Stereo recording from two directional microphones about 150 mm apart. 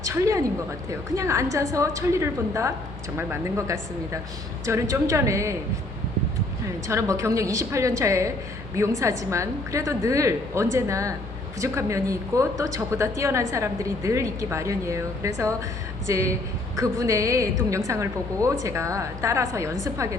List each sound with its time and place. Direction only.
0.0 s a woman's voice: 20° right (ahead or behind)
4.6 s a woman's voice: 20° right (ahead or behind)
6.8 s a woman's voice: 20° right (ahead or behind)